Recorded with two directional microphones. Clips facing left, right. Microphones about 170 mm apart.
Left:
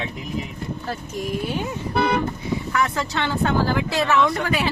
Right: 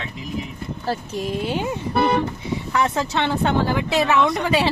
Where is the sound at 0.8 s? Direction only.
25° right (ahead or behind).